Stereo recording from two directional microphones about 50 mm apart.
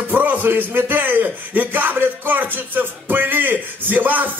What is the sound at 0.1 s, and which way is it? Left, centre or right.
A man's voice, right.